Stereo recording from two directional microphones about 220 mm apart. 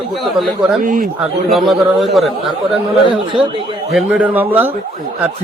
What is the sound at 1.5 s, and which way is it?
Speech, centre (ahead or behind).